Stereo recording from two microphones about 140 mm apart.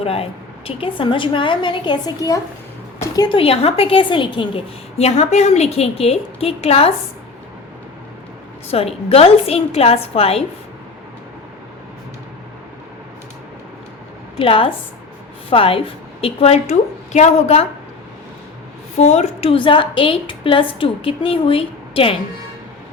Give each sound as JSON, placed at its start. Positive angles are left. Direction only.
{"t": 0.0, "sound": "a woman's voice", "side_deg": 45}
{"t": 3.2, "sound": "a woman's voice", "side_deg": 40}
{"t": 8.7, "sound": "a woman's voice", "side_deg": 45}
{"t": 14.3, "sound": "a woman's voice", "side_deg": 40}
{"t": 18.9, "sound": "a woman's voice", "side_deg": 55}